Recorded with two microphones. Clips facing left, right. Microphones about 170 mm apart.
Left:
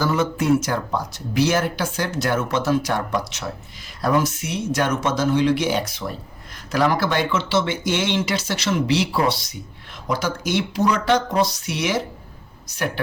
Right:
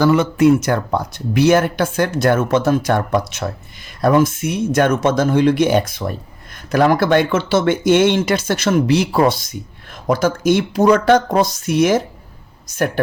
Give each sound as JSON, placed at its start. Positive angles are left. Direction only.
{"t": 0.0, "sound": "speech", "side_deg": -70}